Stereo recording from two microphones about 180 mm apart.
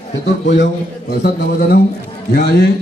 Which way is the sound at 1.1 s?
55° left (ahead or behind).